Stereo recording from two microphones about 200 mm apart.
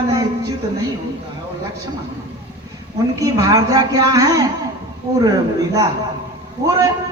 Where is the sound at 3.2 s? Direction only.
15° right (ahead or behind).